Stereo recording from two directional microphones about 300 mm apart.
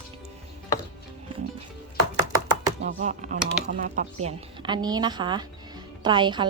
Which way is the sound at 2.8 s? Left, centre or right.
Right.